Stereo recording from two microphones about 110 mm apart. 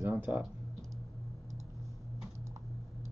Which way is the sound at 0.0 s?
20° right (ahead or behind).